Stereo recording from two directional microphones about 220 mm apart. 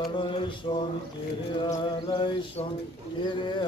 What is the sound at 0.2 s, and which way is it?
Mantra, 20° left (ahead or behind).